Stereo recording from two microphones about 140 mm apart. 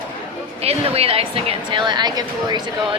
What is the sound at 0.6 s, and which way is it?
Speech, 45° right (ahead or behind).